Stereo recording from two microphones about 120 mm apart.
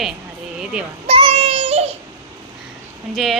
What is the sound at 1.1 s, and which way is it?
Child singing, 55° right (ahead or behind).